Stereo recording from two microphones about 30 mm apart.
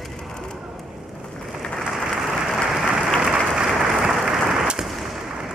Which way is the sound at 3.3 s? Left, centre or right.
Centre.